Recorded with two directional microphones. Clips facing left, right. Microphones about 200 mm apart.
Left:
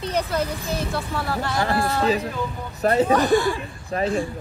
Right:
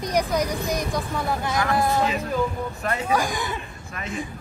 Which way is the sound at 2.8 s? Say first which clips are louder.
Left 11 dB; 35° left (ahead or behind).